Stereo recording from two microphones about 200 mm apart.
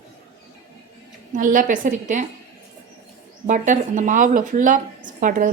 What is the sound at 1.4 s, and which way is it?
Speech, 40° right (ahead or behind).